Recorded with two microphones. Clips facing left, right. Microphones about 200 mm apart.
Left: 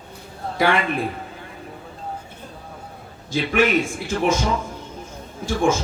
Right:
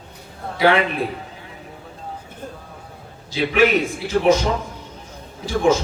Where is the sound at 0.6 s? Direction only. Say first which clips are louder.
Right 3 dB; 50° left (ahead or behind).